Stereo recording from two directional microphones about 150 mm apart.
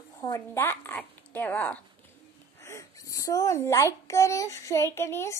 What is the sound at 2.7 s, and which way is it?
A child's voice, 20° left (ahead or behind).